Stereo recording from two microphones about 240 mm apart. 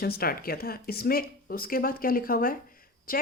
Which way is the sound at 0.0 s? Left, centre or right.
Left.